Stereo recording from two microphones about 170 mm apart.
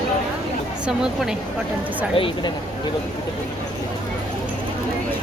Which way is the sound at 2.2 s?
35° left (ahead or behind).